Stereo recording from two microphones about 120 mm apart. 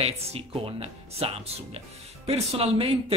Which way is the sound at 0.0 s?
55° right (ahead or behind).